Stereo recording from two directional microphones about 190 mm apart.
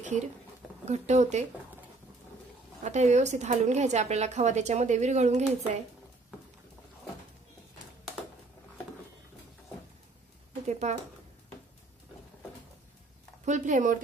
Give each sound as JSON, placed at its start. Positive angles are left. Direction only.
{"t": 0.0, "sound": "a woman's voice", "side_deg": -40}
{"t": 2.8, "sound": "a woman's voice", "side_deg": -35}
{"t": 10.7, "sound": "a sound", "side_deg": -35}
{"t": 13.5, "sound": "a woman's voice", "side_deg": -40}